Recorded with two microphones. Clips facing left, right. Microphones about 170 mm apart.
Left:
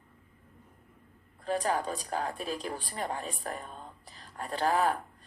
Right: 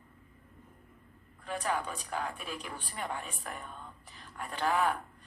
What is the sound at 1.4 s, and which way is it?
Speech, 35° left (ahead or behind).